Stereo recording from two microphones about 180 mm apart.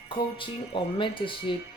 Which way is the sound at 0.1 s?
30° left (ahead or behind).